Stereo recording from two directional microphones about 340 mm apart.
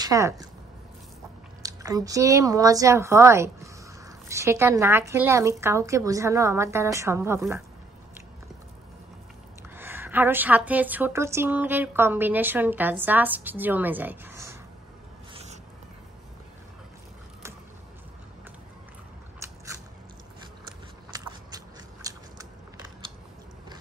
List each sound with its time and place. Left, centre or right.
0.0 s speech: centre
1.6 s a woman's voice: centre
9.8 s a woman's voice: centre
15.3 s cat: centre
19.4 s biting: centre
21.1 s biting: centre